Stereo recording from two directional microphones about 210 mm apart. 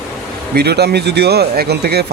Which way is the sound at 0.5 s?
50° right (ahead or behind).